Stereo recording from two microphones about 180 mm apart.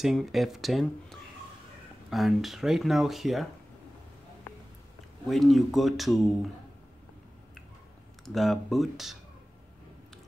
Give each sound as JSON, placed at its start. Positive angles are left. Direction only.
{"t": 0.0, "sound": "speech", "side_deg": 0}
{"t": 5.2, "sound": "speech", "side_deg": 0}
{"t": 8.3, "sound": "speech", "side_deg": 0}